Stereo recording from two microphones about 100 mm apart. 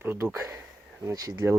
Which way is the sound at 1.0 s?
35° right (ahead or behind).